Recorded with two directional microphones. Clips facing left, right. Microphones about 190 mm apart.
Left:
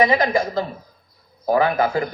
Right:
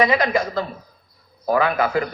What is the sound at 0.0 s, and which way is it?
A man's voice, 25° left (ahead or behind).